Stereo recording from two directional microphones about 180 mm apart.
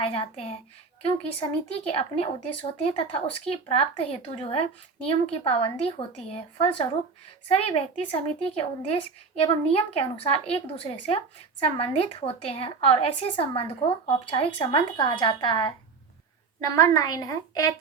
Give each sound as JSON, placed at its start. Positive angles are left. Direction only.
{"t": 0.0, "sound": "a woman's voice", "side_deg": 30}